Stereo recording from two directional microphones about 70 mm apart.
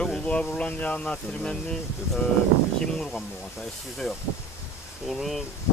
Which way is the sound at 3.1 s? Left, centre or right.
Centre.